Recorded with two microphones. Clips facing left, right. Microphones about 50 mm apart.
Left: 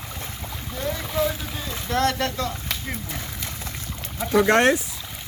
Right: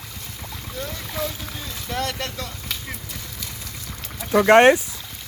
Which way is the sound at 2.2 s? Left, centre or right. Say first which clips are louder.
Left 5 dB; left.